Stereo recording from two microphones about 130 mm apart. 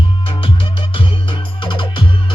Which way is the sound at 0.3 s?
40° left (ahead or behind).